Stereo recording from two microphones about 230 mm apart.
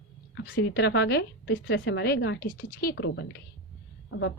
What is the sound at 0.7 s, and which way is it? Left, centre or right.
A woman's voice, left.